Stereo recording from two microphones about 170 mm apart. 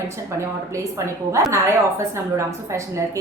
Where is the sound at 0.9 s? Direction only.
15° right (ahead or behind).